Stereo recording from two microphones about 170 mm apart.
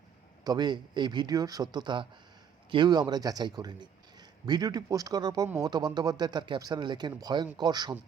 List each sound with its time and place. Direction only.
0.4 s speech: 25° right (ahead or behind)